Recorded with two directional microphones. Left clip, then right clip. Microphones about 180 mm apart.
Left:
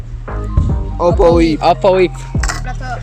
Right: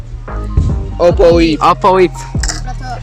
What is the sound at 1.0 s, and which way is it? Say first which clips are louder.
Music: right 2 dB; 5° left (ahead or behind).